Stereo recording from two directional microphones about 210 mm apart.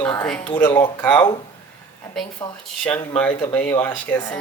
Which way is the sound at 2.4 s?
20° left (ahead or behind).